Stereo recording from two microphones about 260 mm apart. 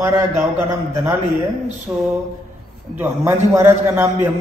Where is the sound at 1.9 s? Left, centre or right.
Centre.